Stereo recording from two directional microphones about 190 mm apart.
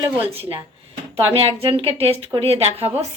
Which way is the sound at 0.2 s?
30° right (ahead or behind).